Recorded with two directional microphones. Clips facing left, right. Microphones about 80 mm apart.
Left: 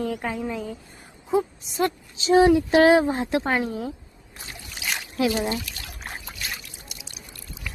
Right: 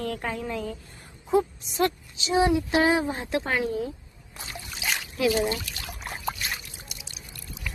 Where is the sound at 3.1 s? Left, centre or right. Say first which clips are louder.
Left 4 dB; left.